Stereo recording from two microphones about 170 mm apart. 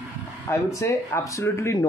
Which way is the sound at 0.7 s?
15° left (ahead or behind).